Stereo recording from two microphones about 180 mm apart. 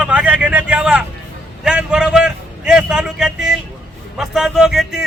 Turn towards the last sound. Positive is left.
turn(degrees=0)  # may be behind; listen again after turning